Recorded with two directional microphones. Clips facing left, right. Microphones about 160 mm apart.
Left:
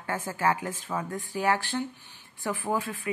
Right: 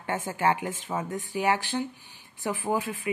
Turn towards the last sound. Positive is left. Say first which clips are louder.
# right 1 dB
turn(degrees=-15)  # may be behind; listen again after turning